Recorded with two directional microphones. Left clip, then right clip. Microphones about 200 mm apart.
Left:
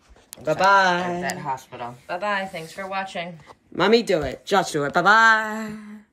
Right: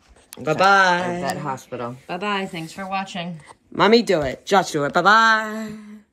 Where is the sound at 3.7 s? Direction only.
35° right (ahead or behind).